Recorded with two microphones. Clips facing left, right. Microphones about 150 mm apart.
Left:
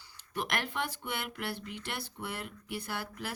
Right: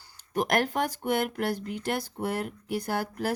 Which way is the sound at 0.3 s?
45° right (ahead or behind).